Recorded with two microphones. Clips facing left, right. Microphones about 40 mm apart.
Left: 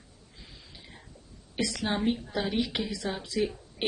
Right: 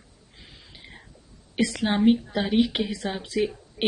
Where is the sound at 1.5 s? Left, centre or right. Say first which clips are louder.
Right 6 dB; right.